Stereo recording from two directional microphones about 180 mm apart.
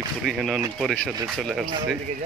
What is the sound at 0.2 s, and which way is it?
Speech, centre (ahead or behind).